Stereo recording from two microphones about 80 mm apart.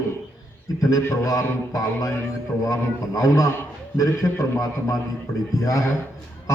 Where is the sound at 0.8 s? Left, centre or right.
Left.